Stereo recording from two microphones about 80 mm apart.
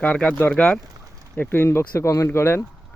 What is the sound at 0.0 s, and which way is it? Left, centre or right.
Speech, centre.